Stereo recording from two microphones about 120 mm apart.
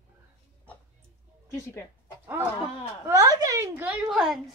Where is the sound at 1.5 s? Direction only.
20° left (ahead or behind).